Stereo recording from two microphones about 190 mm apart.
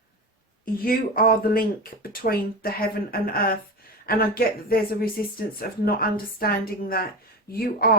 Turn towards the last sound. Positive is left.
turn(degrees=50)  # may be behind; listen again after turning